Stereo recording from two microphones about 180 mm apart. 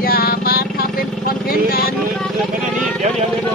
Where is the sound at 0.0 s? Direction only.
55° left (ahead or behind).